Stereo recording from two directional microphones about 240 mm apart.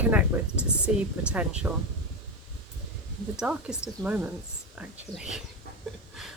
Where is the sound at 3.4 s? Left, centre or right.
Centre.